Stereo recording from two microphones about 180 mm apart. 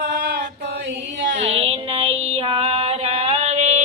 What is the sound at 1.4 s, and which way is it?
Child singing, 35° right (ahead or behind).